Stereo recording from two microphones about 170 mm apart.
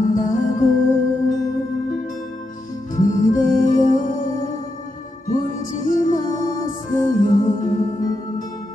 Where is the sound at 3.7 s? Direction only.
50° left (ahead or behind).